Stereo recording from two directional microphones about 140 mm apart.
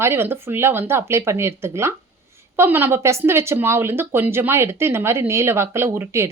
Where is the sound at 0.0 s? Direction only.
15° right (ahead or behind).